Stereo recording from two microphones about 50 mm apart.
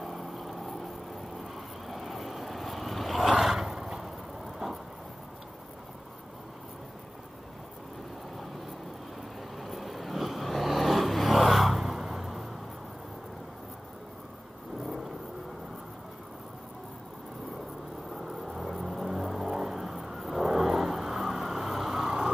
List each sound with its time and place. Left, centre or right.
0.0 s vehicle: centre
1.9 s vehicle: centre
9.6 s vehicle: centre
18.1 s vehicle: centre